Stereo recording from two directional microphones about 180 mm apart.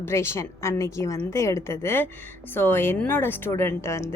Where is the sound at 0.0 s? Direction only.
15° left (ahead or behind).